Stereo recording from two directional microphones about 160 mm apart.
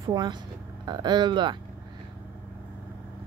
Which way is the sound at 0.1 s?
25° right (ahead or behind).